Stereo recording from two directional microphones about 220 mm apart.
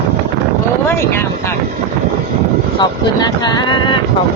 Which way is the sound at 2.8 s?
20° left (ahead or behind).